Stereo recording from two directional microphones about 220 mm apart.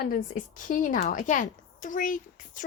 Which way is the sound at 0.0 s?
40° left (ahead or behind).